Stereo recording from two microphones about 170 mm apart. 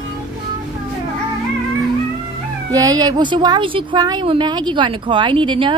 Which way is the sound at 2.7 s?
20° right (ahead or behind).